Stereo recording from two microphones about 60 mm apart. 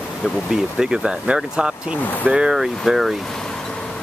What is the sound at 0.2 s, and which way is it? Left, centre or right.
Speech, centre.